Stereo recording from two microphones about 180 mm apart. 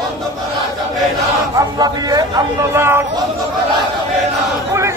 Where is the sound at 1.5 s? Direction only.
20° right (ahead or behind).